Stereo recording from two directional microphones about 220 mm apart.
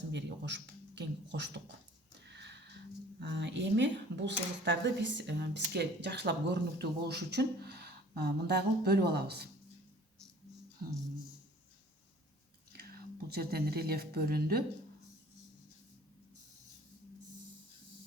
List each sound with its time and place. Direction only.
0.1 s speech: 55° right (ahead or behind)
2.3 s a sound: 50° right (ahead or behind)
3.2 s speech: 55° right (ahead or behind)
12.7 s speech: 45° right (ahead or behind)